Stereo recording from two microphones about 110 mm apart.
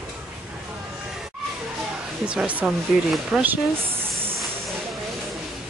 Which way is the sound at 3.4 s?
20° right (ahead or behind).